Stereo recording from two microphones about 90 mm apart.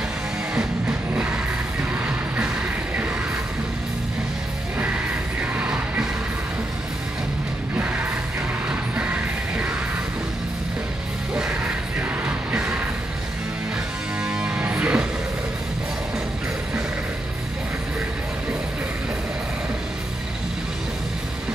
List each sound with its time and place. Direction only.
0.6 s music: 15° right (ahead or behind)
5.4 s music: 15° right (ahead or behind)
7.7 s music: 15° right (ahead or behind)
11.3 s music: 10° right (ahead or behind)
14.2 s music: 10° right (ahead or behind)